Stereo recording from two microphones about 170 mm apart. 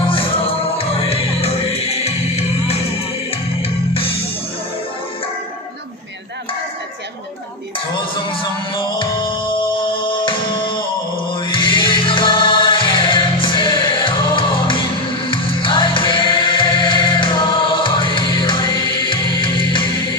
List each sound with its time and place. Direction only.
0.8 s music: 35° left (ahead or behind)
8.3 s music: 30° left (ahead or behind)